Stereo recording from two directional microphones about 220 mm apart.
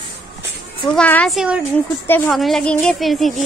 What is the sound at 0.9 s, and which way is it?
Speech, 5° left (ahead or behind).